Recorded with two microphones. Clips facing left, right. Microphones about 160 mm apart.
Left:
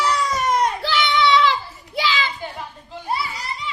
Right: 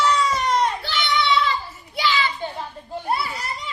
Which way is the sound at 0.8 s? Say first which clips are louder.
Left 4 dB; 70° left (ahead or behind).